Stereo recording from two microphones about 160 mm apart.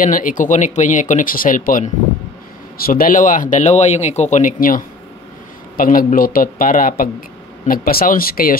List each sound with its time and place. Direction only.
0.0 s speech: 55° left (ahead or behind)